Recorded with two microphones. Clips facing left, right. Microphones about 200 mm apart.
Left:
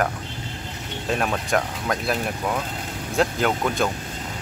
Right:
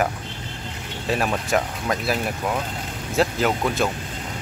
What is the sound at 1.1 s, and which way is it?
Speech, 5° right (ahead or behind).